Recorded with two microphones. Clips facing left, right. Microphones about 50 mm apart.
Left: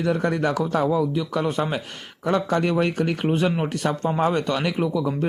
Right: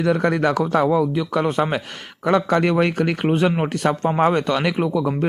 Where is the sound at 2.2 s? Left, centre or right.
Right.